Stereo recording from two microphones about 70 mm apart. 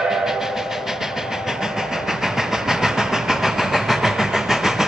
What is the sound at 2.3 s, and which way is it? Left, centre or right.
Train, centre.